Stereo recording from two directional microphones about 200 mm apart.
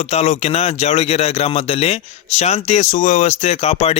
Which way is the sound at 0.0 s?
35° left (ahead or behind).